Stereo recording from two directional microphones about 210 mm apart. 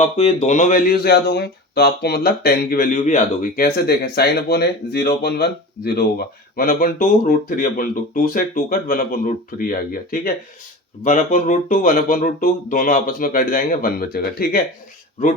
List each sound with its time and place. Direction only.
0.0 s speech: 30° left (ahead or behind)